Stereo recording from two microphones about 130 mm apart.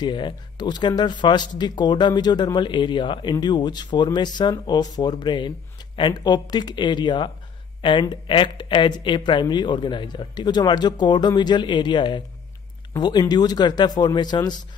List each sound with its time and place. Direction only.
0.0 s speech: 35° left (ahead or behind)